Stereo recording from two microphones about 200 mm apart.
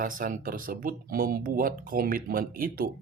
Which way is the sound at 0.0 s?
45° right (ahead or behind).